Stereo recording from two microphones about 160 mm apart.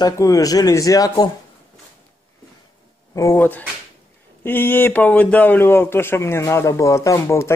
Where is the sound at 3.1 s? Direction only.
15° left (ahead or behind).